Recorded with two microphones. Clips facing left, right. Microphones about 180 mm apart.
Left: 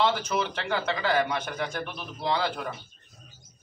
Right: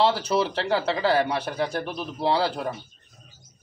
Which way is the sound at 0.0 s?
35° right (ahead or behind).